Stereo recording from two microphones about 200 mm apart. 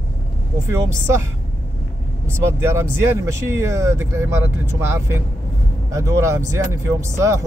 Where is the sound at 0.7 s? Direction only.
15° right (ahead or behind).